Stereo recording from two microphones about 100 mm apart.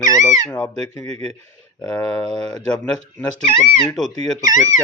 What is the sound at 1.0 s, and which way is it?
Speech, 90° right.